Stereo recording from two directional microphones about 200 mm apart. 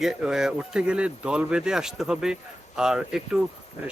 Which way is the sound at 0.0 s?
5° right (ahead or behind).